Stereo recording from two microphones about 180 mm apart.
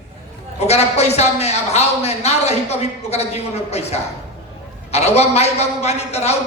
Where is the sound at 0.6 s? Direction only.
35° left (ahead or behind).